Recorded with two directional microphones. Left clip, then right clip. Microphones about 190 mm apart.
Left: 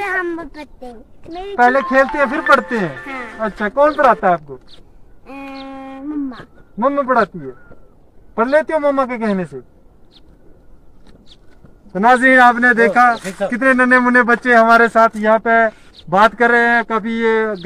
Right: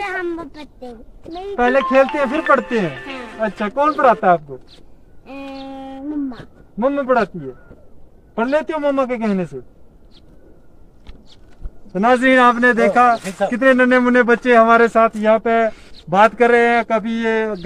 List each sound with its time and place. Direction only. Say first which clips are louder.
0.0 s a sound: left 3 dB; 5° left (ahead or behind)
1.5 s a man's voice: left 2 dB; 15° right (ahead or behind)
2.8 s speech: left 1 dB; 5° left (ahead or behind)
3.3 s a man's voice: left 3 dB; 15° right (ahead or behind)
5.5 s a sound: left 1 dB; 10° left (ahead or behind)
6.8 s a man's voice: left 2 dB; 10° right (ahead or behind)
8.4 s a man's voice: left 4 dB; 10° right (ahead or behind)
11.9 s a man's voice: left 3 dB; 20° right (ahead or behind)